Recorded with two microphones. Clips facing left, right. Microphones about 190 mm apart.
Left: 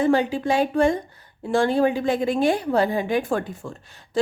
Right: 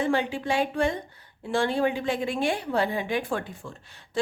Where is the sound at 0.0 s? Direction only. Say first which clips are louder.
Left 6 dB; 40° left (ahead or behind).